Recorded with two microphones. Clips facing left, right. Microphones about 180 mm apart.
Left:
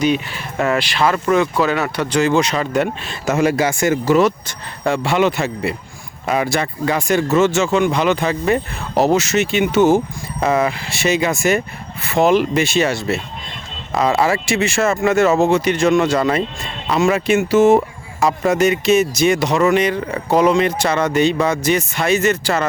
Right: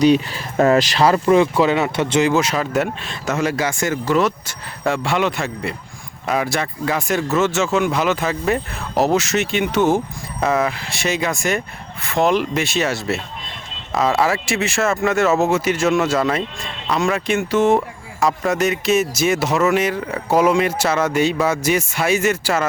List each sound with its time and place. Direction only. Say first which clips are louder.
0.0 s speech: right 4 dB; 35° right (ahead or behind)
2.3 s speech: left 2 dB; 5° right (ahead or behind)